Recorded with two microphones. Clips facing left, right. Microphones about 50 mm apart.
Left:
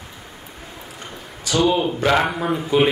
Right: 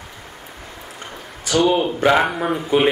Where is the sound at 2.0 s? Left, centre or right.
Centre.